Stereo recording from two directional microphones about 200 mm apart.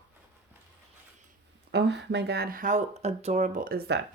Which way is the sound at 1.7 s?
60° right (ahead or behind).